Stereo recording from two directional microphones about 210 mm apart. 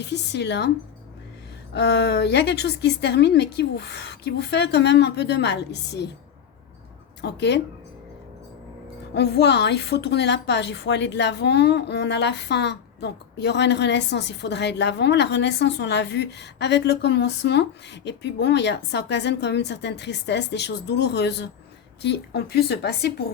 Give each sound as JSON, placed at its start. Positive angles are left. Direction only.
{"t": 0.0, "sound": "a woman's voice", "side_deg": 55}
{"t": 1.7, "sound": "a woman's voice", "side_deg": 55}
{"t": 7.2, "sound": "a woman's voice", "side_deg": 55}
{"t": 9.1, "sound": "a woman's voice", "side_deg": 50}